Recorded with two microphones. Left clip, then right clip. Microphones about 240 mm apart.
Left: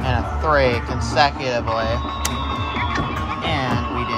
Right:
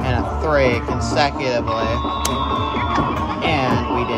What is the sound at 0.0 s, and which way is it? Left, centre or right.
Speech, centre.